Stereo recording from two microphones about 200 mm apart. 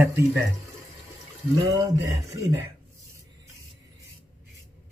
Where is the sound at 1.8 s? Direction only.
15° right (ahead or behind).